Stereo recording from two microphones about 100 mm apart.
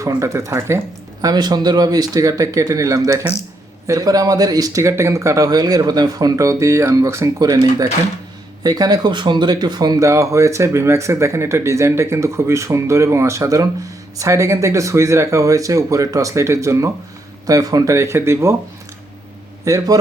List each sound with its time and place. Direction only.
0.2 s speech: 30° right (ahead or behind)
1.2 s speech: 45° right (ahead or behind)
10.1 s speech: 30° right (ahead or behind)
19.6 s speech: 35° right (ahead or behind)